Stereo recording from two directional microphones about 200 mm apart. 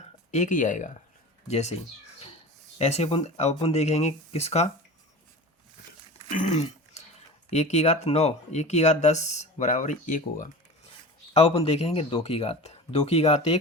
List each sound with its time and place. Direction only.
0.3 s speech: 40° left (ahead or behind)
2.7 s speech: 30° left (ahead or behind)
6.3 s dog: 35° left (ahead or behind)
7.5 s speech: 35° left (ahead or behind)
11.3 s speech: 25° left (ahead or behind)